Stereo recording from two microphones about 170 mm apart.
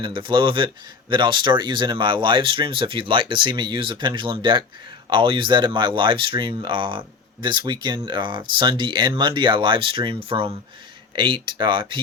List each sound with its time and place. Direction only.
0.0 s speech: 30° right (ahead or behind)